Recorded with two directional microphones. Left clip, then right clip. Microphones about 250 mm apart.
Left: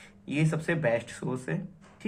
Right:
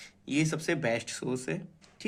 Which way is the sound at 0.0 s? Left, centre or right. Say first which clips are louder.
Right 1 dB; right.